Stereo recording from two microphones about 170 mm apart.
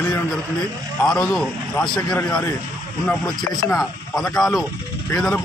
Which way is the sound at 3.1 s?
Centre (ahead or behind).